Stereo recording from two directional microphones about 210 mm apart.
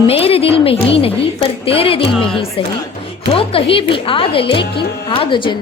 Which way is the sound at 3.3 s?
25° left (ahead or behind).